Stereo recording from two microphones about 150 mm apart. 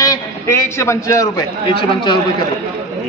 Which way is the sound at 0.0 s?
20° left (ahead or behind).